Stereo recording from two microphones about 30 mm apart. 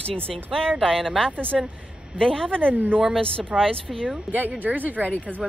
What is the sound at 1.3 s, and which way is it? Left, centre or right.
Speech, right.